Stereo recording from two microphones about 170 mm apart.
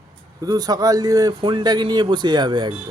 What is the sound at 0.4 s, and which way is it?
Speech, 25° right (ahead or behind).